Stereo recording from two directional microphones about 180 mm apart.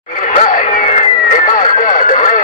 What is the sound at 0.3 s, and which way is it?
Vehicle, 45° left (ahead or behind).